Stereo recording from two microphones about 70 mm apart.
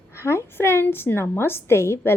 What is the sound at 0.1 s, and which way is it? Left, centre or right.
A woman's voice, left.